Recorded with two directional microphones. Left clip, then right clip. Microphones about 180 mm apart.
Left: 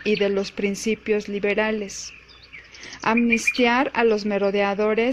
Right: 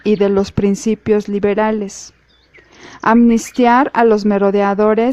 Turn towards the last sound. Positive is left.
turn(degrees=-45)  # may be behind; listen again after turning